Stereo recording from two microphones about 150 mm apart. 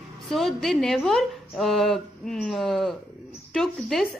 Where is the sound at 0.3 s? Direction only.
Centre (ahead or behind).